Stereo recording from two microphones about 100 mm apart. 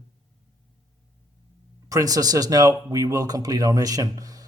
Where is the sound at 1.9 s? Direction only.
35° right (ahead or behind).